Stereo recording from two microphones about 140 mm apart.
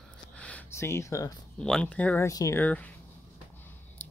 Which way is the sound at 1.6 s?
5° left (ahead or behind).